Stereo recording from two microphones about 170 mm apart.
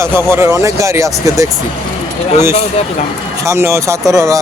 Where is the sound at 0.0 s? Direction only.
15° right (ahead or behind).